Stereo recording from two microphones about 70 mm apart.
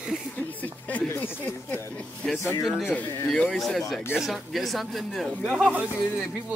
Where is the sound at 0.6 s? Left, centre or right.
Left.